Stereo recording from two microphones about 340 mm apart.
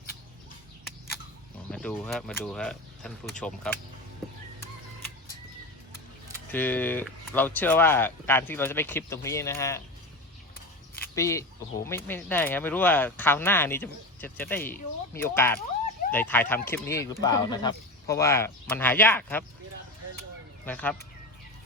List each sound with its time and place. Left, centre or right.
1.7 s speech: centre
6.5 s speech: centre
11.1 s speech: centre
20.7 s speech: centre